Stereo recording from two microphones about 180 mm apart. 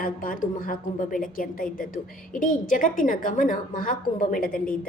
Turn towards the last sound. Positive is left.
turn(degrees=55)  # may be behind; listen again after turning